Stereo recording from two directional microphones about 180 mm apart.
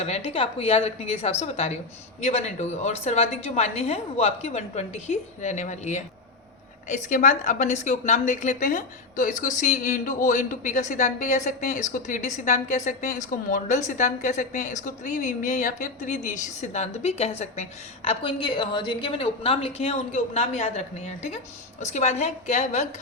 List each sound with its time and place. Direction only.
0.0 s a woman's voice: 35° left (ahead or behind)